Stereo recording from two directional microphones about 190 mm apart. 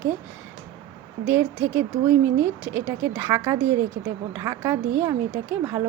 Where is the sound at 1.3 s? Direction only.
10° right (ahead or behind).